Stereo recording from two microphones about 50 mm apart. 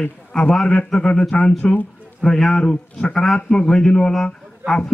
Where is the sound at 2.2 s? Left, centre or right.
Centre.